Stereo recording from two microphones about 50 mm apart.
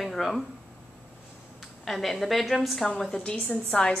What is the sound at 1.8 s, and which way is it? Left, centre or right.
A woman's voice, centre.